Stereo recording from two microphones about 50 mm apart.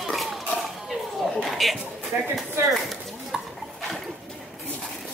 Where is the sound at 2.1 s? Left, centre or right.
Right.